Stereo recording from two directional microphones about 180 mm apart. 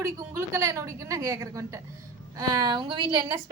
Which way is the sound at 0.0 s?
15° right (ahead or behind).